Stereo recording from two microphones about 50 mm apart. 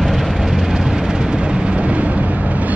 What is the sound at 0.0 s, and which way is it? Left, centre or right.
Vehicle, centre.